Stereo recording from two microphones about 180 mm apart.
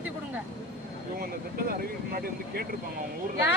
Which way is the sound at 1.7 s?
55° right (ahead or behind).